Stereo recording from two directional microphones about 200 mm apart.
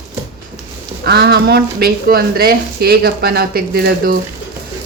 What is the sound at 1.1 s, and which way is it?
Speech, 55° right (ahead or behind).